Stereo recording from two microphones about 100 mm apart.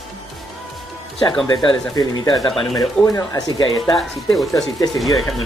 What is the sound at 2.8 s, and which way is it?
Speech, 35° left (ahead or behind).